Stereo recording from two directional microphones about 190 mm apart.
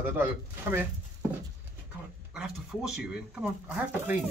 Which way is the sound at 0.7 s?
10° right (ahead or behind).